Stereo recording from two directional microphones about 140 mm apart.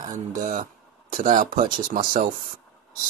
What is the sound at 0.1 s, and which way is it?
Speech, 60° right (ahead or behind).